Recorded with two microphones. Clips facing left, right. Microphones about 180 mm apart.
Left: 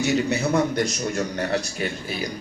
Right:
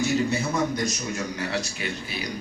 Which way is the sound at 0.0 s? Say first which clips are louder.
Left 2 dB; 70° left (ahead or behind).